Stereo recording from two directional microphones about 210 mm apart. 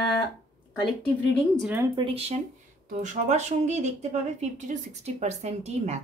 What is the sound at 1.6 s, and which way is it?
Speech, 10° right (ahead or behind).